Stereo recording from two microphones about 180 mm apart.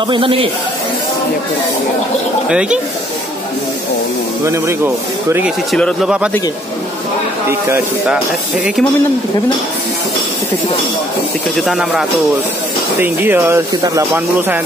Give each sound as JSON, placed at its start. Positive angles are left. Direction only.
{"t": 0.1, "sound": "a man's voice", "side_deg": -30}
{"t": 4.5, "sound": "speech", "side_deg": -15}
{"t": 5.7, "sound": "speech", "side_deg": 0}
{"t": 11.6, "sound": "speech", "side_deg": 0}